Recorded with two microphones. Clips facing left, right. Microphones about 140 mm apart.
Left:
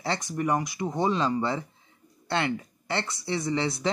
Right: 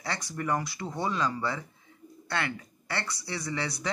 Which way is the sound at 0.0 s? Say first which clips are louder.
Left 5 dB; 20° left (ahead or behind).